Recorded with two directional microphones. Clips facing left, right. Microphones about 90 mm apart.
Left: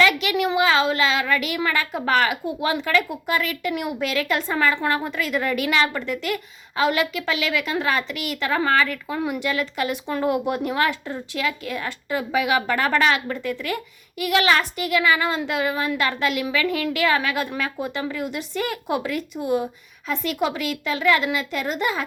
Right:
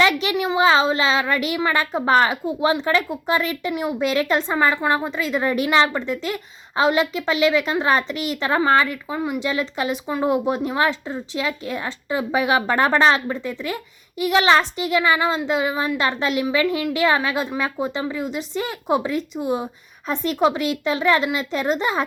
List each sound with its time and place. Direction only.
0.0 s a sound: 30° right (ahead or behind)
0.4 s a woman's voice: 30° right (ahead or behind)
4.5 s a woman's voice: 15° right (ahead or behind); by 15.2 s 30° right (ahead or behind)
15.4 s a woman's voice: 20° right (ahead or behind)